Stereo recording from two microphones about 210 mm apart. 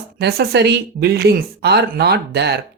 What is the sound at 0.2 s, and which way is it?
Speech, 50° right (ahead or behind).